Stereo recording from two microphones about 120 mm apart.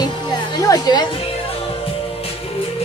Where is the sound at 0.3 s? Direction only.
35° left (ahead or behind).